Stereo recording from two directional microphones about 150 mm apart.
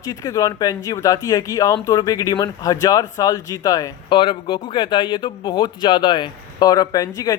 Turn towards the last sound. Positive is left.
turn(degrees=25)  # may be behind; listen again after turning